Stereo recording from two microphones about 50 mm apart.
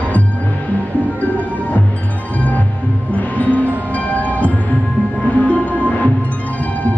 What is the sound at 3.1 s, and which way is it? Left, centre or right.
Music, left.